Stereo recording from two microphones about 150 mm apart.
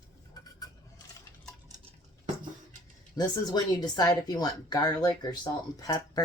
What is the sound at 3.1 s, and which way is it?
Speech, 25° left (ahead or behind).